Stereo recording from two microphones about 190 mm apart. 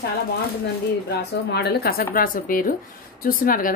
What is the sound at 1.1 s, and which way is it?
A woman's voice, 55° left (ahead or behind).